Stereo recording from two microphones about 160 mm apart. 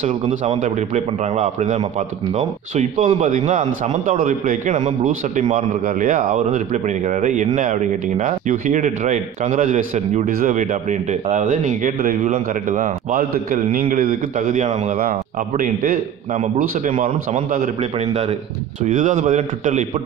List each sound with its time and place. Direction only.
0.3 s a man's voice: 50° right (ahead or behind)
14.4 s a man's voice: 45° right (ahead or behind)
15.0 s a man's voice: 60° right (ahead or behind)
17.9 s a man's voice: 40° right (ahead or behind)
18.8 s a man's voice: 55° right (ahead or behind)